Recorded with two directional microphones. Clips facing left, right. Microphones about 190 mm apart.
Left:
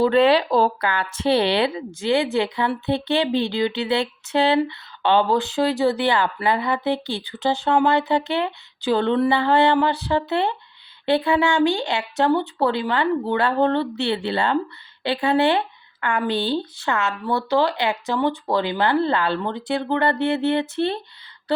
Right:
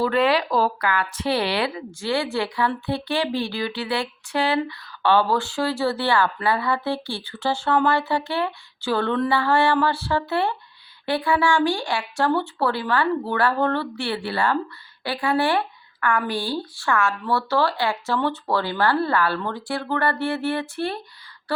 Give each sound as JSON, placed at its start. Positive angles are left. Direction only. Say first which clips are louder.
{"t": 0.0, "sound": "speech", "louder": "left 4 dB", "side_deg": 25}